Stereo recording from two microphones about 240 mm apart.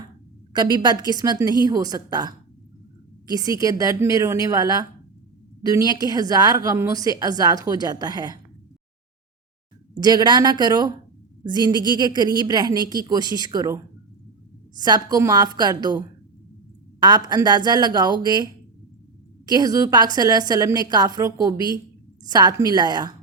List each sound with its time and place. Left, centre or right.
0.5 s a woman's voice: centre
10.0 s a woman's voice: centre
14.8 s a woman's voice: centre
19.5 s a woman's voice: centre